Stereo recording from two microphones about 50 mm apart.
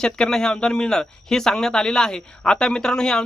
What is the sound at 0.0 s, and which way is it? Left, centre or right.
Speech, centre.